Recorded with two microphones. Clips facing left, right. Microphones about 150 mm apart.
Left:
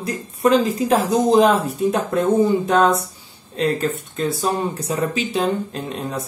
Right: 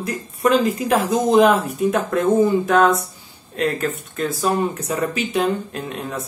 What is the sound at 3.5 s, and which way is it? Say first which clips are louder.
Speech: left 1 dB; 30° left (ahead or behind).